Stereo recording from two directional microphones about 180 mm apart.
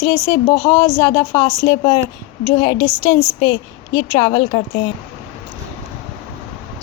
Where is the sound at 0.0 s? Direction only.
20° left (ahead or behind).